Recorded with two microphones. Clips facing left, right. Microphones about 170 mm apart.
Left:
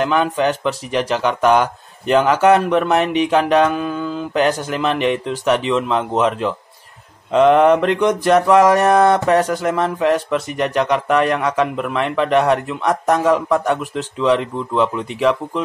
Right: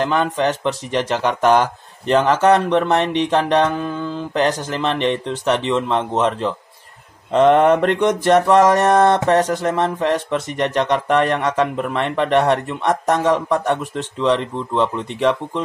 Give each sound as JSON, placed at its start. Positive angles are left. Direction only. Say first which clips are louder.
{"t": 0.0, "sound": "speech", "louder": "left 1 dB", "side_deg": 0}
{"t": 2.6, "sound": "speech", "louder": "left 1 dB", "side_deg": -25}
{"t": 3.0, "sound": "speech", "louder": "left 2 dB", "side_deg": 5}
{"t": 7.3, "sound": "speech", "louder": "left 1 dB", "side_deg": 0}
{"t": 11.7, "sound": "speech", "louder": "even", "side_deg": -35}
{"t": 12.0, "sound": "speech", "louder": "left 1 dB", "side_deg": 0}